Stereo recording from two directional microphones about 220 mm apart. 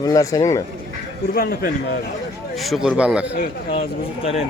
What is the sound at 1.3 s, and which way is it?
Speech, 40° left (ahead or behind).